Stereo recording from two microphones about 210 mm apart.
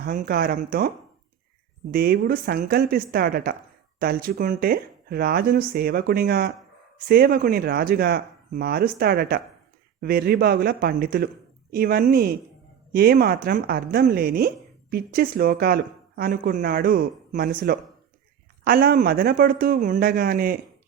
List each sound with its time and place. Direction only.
0.0 s speech: 45° right (ahead or behind)